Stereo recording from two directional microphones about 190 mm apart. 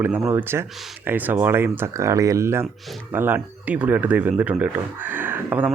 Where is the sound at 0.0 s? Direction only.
10° right (ahead or behind).